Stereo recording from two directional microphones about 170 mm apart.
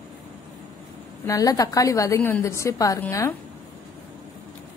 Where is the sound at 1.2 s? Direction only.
20° left (ahead or behind).